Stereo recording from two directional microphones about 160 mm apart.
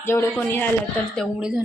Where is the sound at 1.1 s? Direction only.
Centre (ahead or behind).